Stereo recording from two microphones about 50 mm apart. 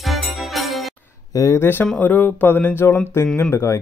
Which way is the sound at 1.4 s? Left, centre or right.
Left.